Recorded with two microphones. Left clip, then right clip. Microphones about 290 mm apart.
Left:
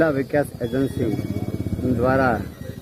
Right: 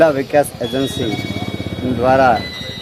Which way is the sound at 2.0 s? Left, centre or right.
Centre.